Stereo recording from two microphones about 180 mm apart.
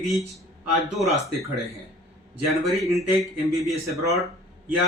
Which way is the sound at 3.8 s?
15° right (ahead or behind).